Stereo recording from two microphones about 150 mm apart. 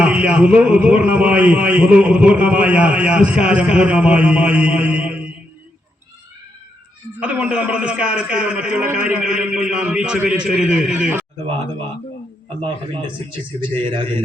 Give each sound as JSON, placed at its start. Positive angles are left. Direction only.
{"t": 0.0, "sound": "a man's voice", "side_deg": -5}
{"t": 7.2, "sound": "a man's voice", "side_deg": -10}
{"t": 12.6, "sound": "speech", "side_deg": -35}